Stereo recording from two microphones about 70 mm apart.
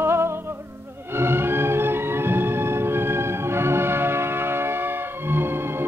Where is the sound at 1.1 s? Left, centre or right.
Right.